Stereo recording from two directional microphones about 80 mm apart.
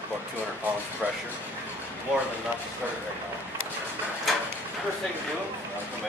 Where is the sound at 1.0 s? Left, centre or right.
Centre.